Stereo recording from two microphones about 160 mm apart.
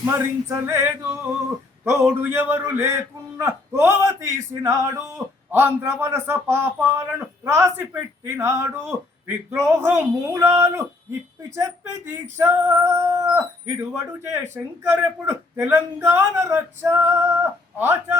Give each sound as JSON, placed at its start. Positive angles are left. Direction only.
{"t": 0.0, "sound": "a man's voice", "side_deg": -15}